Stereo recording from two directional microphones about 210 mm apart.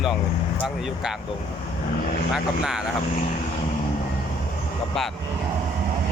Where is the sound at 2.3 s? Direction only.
5° right (ahead or behind).